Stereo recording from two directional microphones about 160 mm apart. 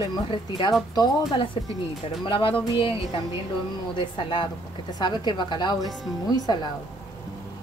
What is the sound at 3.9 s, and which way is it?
A woman's voice, 30° left (ahead or behind).